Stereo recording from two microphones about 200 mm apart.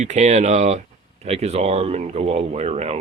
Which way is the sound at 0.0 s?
35° right (ahead or behind).